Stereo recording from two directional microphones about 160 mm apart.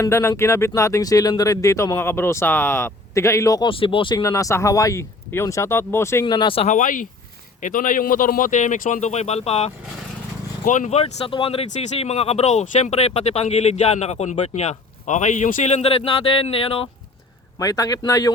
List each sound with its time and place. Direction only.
0.0 s speech: 15° left (ahead or behind)
3.7 s speech: 35° left (ahead or behind)
4.2 s speech: 20° left (ahead or behind)
6.2 s speech: 30° left (ahead or behind)
17.6 s speech: 25° left (ahead or behind)